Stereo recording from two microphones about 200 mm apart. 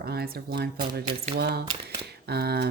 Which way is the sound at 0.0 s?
50° right (ahead or behind).